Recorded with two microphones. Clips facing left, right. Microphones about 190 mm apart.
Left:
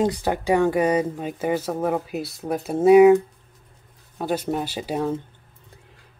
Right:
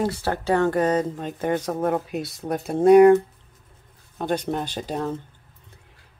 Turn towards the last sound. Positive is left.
turn(degrees=10)  # may be behind; listen again after turning